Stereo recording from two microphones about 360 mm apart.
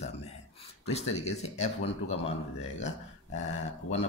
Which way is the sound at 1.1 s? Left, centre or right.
Centre.